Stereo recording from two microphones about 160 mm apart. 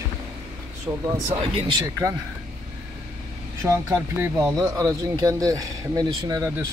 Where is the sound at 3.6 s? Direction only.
15° right (ahead or behind).